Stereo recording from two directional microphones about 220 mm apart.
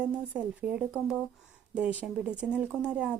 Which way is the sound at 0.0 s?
5° right (ahead or behind).